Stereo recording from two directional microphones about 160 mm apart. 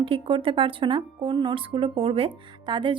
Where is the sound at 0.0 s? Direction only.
35° right (ahead or behind).